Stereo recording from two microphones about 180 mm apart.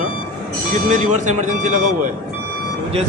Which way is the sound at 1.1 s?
45° right (ahead or behind).